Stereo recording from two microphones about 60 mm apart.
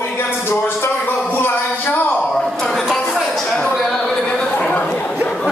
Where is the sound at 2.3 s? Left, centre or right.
Centre.